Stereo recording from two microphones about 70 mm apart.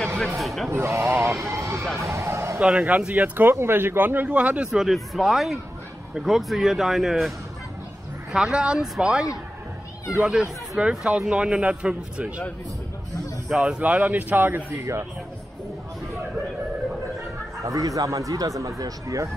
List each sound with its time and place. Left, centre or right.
0.4 s speech: centre
0.7 s speech: right
2.0 s a sound: right
2.6 s speech: centre
3.2 s speech: right
4.6 s speech: centre
13.5 s speech: centre; by 14.6 s right
14.7 s speech: right
17.6 s speech: right